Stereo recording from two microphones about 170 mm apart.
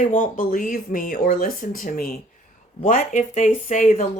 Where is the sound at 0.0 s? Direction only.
50° left (ahead or behind).